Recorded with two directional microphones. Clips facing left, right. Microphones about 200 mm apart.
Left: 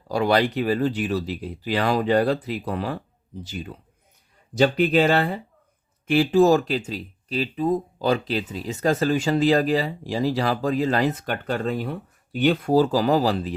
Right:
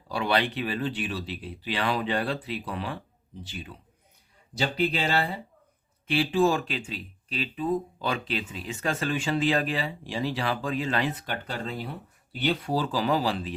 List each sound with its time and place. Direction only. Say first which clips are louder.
0.1 s speech: left 6 dB; 40° left (ahead or behind)